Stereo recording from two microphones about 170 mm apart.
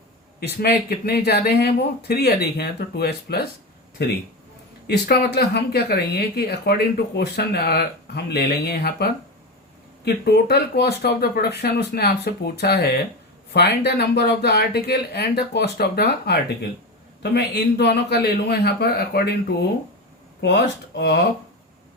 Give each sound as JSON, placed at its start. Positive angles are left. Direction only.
{"t": 0.3, "sound": "speech", "side_deg": 65}
{"t": 4.9, "sound": "speech", "side_deg": 70}
{"t": 20.4, "sound": "speech", "side_deg": 90}